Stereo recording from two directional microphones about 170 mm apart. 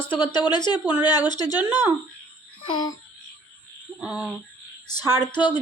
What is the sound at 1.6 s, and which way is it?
Speech, 10° right (ahead or behind).